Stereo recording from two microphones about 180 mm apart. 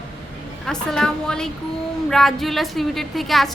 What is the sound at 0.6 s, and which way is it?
A woman's voice, 5° left (ahead or behind).